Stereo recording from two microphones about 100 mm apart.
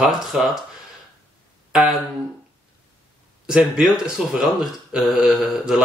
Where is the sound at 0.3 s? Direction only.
10° right (ahead or behind).